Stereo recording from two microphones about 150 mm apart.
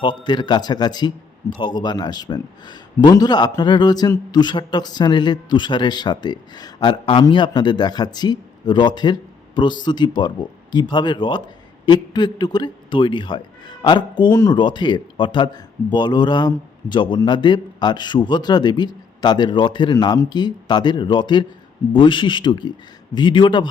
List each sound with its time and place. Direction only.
0.3 s a man's voice: 30° left (ahead or behind)
14.3 s a man's voice: 20° left (ahead or behind)
14.5 s a man's voice: 30° left (ahead or behind)